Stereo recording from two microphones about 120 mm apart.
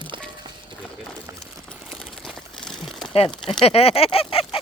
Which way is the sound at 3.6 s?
55° left (ahead or behind).